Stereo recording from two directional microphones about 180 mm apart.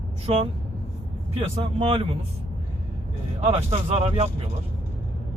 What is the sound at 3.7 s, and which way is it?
Speech, 35° right (ahead or behind).